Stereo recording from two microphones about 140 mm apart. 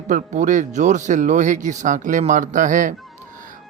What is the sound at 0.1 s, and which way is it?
A man's voice, 65° right (ahead or behind).